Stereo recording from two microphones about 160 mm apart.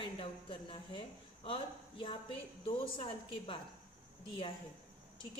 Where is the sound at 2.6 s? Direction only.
35° left (ahead or behind).